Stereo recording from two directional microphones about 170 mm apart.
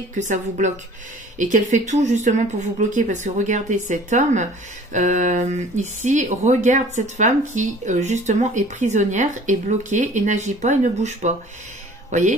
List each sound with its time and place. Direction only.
0.1 s speech: 45° right (ahead or behind)